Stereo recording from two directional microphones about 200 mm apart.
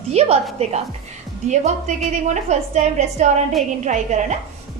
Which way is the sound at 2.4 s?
35° right (ahead or behind).